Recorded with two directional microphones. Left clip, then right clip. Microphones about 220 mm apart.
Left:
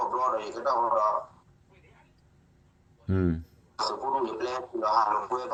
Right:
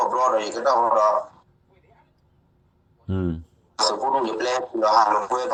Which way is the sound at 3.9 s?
50° right (ahead or behind).